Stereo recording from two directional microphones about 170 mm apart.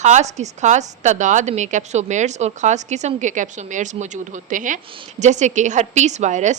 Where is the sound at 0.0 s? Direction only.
45° right (ahead or behind).